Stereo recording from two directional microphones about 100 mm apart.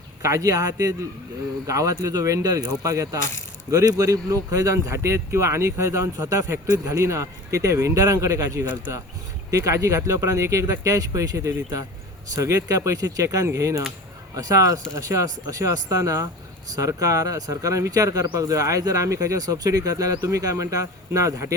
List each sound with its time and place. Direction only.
0.2 s speech: 30° right (ahead or behind)